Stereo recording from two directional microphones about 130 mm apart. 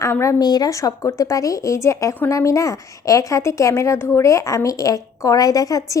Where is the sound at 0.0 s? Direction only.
20° left (ahead or behind).